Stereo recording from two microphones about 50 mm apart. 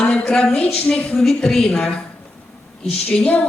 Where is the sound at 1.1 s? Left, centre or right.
Centre.